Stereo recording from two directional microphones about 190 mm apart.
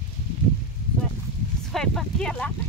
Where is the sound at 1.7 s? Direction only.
Centre (ahead or behind).